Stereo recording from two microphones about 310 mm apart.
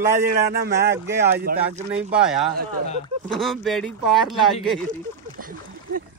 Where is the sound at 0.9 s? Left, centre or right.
Centre.